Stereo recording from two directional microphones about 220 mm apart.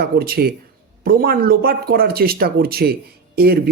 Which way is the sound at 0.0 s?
45° right (ahead or behind).